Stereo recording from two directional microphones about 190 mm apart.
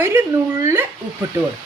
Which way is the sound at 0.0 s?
10° right (ahead or behind).